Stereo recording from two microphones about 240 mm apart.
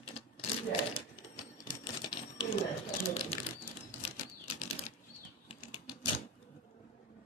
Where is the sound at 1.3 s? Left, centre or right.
Centre.